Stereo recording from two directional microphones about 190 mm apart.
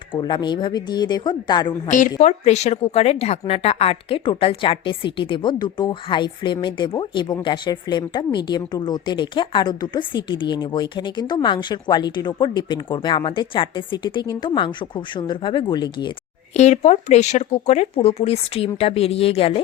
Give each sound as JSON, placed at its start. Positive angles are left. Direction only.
{"t": 0.1, "sound": "a woman's voice", "side_deg": 25}
{"t": 2.2, "sound": "a woman's voice", "side_deg": 35}
{"t": 16.6, "sound": "speech", "side_deg": 35}